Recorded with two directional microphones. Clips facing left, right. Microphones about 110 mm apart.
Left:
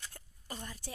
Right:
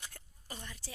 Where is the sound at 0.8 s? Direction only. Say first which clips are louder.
Left 4 dB; 55° left (ahead or behind).